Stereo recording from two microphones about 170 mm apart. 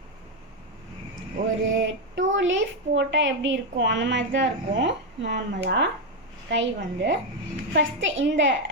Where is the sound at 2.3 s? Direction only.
90° right.